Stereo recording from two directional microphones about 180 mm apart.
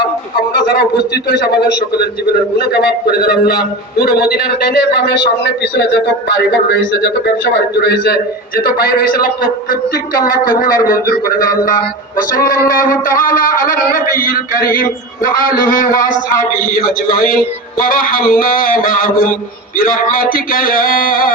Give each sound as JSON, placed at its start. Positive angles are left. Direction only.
{"t": 0.7, "sound": "a man's voice", "side_deg": 60}
{"t": 2.6, "sound": "a man's voice", "side_deg": 60}